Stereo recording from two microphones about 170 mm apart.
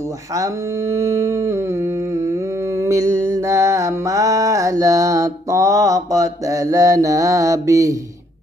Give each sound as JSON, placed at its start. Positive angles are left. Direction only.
{"t": 0.4, "sound": "mantra", "side_deg": -15}
{"t": 2.8, "sound": "mantra", "side_deg": -20}